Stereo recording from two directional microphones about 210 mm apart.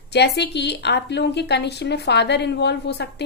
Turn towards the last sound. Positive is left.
turn(degrees=55)  # may be behind; listen again after turning